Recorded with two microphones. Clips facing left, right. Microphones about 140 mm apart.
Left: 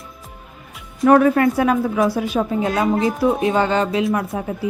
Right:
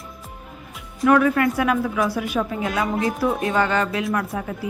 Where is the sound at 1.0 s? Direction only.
35° left (ahead or behind).